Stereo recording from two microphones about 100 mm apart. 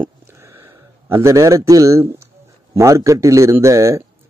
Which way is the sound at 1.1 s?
30° right (ahead or behind).